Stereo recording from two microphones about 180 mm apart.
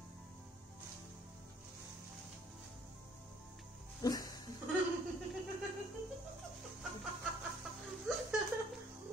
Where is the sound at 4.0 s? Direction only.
20° left (ahead or behind).